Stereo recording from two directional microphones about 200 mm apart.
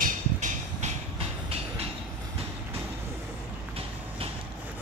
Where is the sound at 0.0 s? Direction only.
40° right (ahead or behind).